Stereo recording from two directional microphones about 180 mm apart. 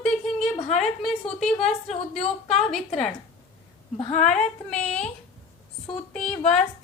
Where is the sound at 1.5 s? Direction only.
5° left (ahead or behind).